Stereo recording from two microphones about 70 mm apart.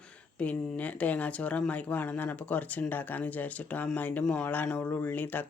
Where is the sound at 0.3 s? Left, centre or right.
Centre.